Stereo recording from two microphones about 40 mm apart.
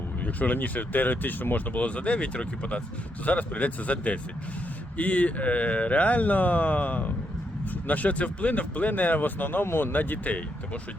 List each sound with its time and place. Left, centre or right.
0.3 s speech: left
1.7 s speech: left
9.6 s speech: left
9.9 s speech: left